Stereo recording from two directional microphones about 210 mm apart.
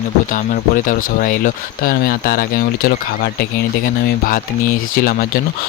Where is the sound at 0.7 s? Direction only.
40° left (ahead or behind).